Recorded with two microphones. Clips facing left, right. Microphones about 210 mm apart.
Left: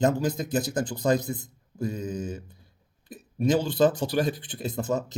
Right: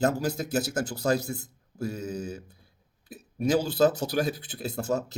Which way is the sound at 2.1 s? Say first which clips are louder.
Left 2 dB; 40° right (ahead or behind).